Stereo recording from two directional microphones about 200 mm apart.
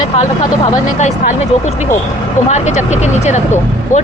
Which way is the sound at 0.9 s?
35° left (ahead or behind).